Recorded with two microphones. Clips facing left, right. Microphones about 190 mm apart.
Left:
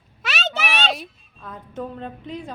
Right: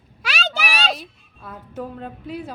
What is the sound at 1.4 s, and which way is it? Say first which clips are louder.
A woman's voice: even; 5° right (ahead or behind).